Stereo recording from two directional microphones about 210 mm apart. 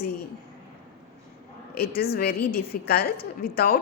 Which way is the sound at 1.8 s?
50° left (ahead or behind).